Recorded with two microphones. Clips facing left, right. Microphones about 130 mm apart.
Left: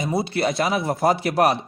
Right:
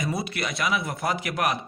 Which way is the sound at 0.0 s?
25° left (ahead or behind).